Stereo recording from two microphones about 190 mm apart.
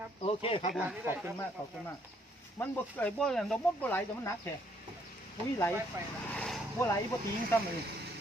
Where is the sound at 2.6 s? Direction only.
10° left (ahead or behind).